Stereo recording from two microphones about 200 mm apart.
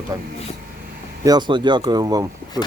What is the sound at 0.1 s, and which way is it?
Speech, 20° right (ahead or behind).